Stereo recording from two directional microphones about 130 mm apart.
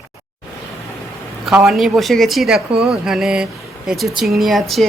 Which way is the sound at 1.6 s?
Centre (ahead or behind).